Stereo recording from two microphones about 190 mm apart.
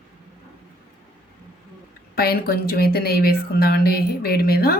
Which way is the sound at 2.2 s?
55° left (ahead or behind).